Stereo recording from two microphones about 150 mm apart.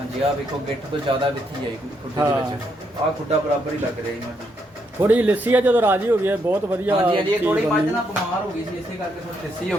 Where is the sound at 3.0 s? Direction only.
35° right (ahead or behind).